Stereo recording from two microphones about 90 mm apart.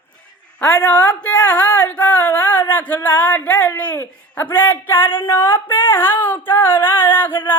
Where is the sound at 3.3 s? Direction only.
15° left (ahead or behind).